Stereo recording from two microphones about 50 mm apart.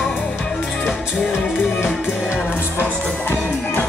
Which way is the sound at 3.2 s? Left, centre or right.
Left.